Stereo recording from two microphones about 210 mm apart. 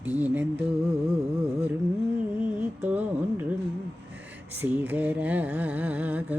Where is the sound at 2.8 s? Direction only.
10° right (ahead or behind).